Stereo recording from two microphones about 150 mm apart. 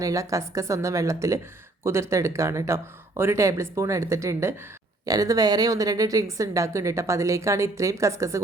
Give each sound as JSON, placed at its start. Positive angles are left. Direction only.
{"t": 0.0, "sound": "a woman's voice", "side_deg": -20}